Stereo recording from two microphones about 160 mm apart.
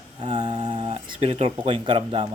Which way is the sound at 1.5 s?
30° right (ahead or behind).